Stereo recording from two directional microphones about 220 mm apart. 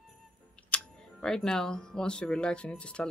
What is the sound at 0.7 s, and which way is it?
Speech, 5° left (ahead or behind).